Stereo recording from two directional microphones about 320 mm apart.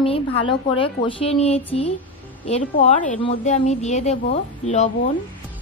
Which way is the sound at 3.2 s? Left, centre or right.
Centre.